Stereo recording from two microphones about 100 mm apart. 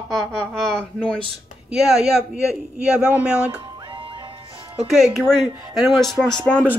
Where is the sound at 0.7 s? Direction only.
10° left (ahead or behind).